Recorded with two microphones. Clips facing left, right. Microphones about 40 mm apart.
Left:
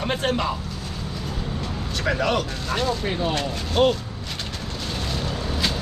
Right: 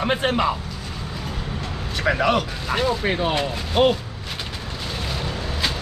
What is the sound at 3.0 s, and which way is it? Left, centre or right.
Speech, right.